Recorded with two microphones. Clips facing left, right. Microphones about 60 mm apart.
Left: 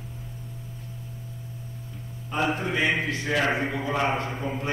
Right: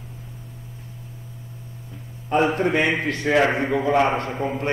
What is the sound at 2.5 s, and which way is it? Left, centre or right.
A man's voice, right.